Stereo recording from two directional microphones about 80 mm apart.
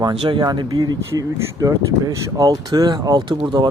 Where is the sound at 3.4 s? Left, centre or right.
Right.